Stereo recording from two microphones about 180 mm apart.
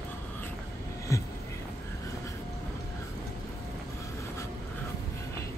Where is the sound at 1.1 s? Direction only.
15° left (ahead or behind).